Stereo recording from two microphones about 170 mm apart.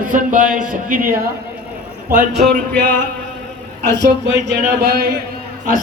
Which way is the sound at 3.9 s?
90° right.